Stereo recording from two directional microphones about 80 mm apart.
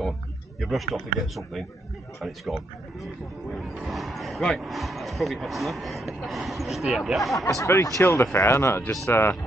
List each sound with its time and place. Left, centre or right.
0.6 s speech: centre
7.3 s speech: left